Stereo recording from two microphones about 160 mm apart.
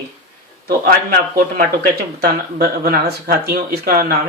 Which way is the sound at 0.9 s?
65° right (ahead or behind).